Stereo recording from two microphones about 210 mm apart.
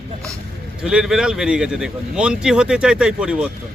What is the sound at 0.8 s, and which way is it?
Speech, 5° right (ahead or behind).